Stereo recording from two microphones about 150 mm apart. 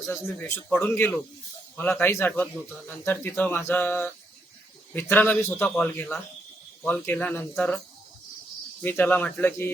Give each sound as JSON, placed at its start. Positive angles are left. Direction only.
{"t": 0.0, "sound": "a man's voice", "side_deg": 20}
{"t": 8.8, "sound": "speech", "side_deg": 10}